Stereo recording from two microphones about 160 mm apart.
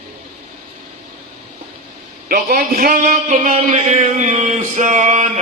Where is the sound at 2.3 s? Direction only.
55° right (ahead or behind).